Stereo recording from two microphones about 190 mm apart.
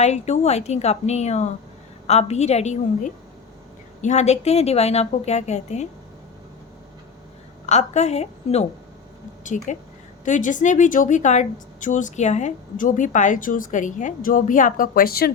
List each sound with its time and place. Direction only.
0.0 s a woman's voice: 35° left (ahead or behind)
7.7 s a woman's voice: 35° left (ahead or behind); by 15.3 s 55° left (ahead or behind)